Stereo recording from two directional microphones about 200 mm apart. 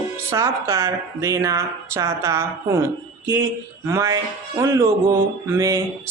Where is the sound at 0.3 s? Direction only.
15° right (ahead or behind).